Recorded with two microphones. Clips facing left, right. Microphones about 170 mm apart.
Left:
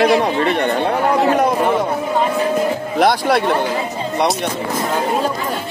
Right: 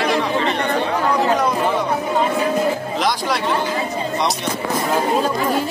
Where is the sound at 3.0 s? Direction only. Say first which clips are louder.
Left 10 dB; 55° left (ahead or behind).